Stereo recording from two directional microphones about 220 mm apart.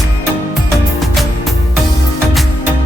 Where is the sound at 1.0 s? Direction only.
Centre (ahead or behind).